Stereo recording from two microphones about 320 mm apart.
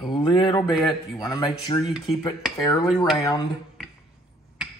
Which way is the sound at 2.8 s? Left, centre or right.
Centre.